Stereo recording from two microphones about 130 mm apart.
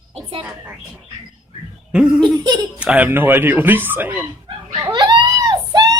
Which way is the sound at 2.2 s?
35° right (ahead or behind).